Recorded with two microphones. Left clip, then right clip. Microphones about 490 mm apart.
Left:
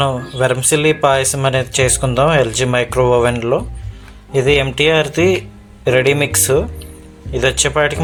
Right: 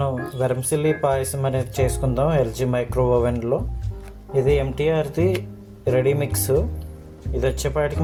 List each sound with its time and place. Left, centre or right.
0.0 s speech: right